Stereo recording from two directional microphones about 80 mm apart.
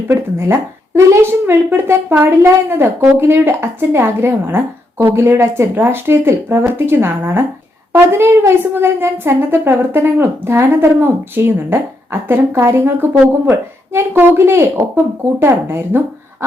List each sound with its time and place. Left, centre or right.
0.1 s a woman's voice: right